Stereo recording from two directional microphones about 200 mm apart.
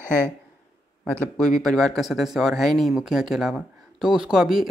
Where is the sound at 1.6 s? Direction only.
Centre (ahead or behind).